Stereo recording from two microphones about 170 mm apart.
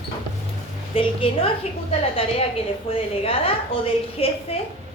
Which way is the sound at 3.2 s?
35° left (ahead or behind).